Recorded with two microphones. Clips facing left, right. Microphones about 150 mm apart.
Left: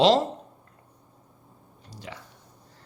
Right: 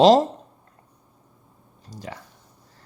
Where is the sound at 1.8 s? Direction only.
45° right (ahead or behind).